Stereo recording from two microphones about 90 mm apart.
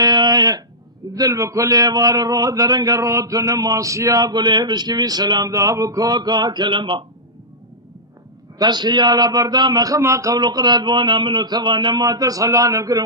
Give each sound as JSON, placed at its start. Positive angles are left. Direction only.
{"t": 0.0, "sound": "a sound", "side_deg": -50}
{"t": 1.1, "sound": "a man's voice", "side_deg": -40}
{"t": 5.5, "sound": "a man's voice", "side_deg": -35}
{"t": 8.5, "sound": "a man's voice", "side_deg": -55}
{"t": 10.3, "sound": "a man's voice", "side_deg": -50}